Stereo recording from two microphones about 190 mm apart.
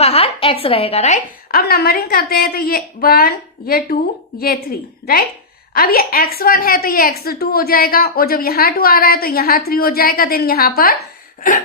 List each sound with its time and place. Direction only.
0.0 s a woman's voice: 30° left (ahead or behind)
1.5 s a woman's voice: 55° left (ahead or behind)
5.7 s a woman's voice: 50° left (ahead or behind)